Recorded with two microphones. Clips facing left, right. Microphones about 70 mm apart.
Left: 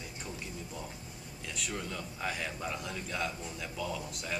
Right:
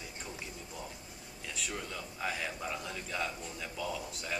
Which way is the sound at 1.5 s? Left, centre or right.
Centre.